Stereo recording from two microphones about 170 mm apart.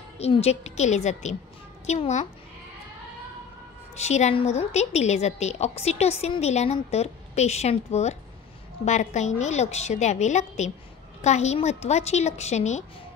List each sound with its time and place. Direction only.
0.2 s a woman's voice: 35° left (ahead or behind)
4.0 s a woman's voice: 40° left (ahead or behind)